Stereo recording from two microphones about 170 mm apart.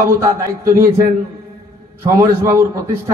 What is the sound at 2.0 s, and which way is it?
A man's voice, 15° right (ahead or behind).